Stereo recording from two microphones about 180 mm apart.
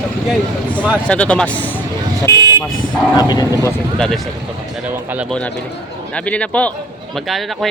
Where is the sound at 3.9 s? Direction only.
5° left (ahead or behind).